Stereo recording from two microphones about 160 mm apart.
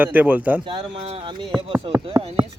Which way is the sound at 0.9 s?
35° right (ahead or behind).